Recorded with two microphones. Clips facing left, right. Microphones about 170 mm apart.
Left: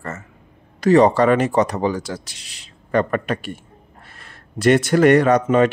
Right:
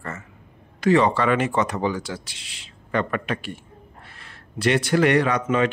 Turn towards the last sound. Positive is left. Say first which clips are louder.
# left 6 dB
turn(degrees=45)  # may be behind; listen again after turning